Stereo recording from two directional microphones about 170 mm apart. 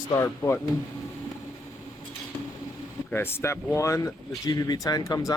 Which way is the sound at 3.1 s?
15° left (ahead or behind).